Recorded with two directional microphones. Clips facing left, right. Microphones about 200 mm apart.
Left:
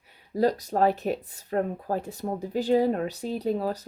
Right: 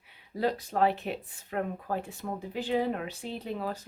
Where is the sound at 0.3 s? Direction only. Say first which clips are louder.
Left 5 dB; 40° left (ahead or behind).